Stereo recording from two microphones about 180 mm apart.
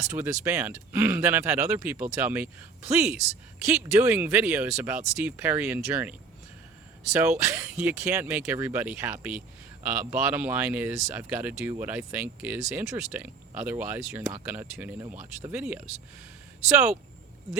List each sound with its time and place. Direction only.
0.1 s speech: 15° right (ahead or behind)